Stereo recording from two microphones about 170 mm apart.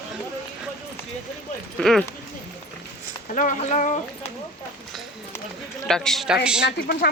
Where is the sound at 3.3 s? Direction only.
50° left (ahead or behind).